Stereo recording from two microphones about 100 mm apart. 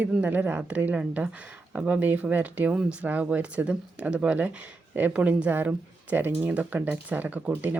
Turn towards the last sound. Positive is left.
turn(degrees=-20)  # may be behind; listen again after turning